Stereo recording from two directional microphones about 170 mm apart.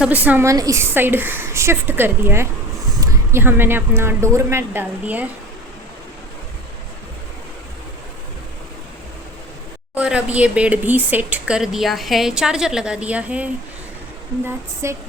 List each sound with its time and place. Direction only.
0.0 s speech: 10° right (ahead or behind)
9.9 s speech: 5° right (ahead or behind)